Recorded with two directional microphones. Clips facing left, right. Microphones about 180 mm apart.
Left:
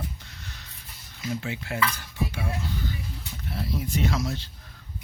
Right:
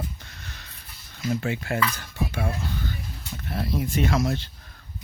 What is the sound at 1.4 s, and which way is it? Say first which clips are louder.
Speech: right 5 dB; 50° right (ahead or behind).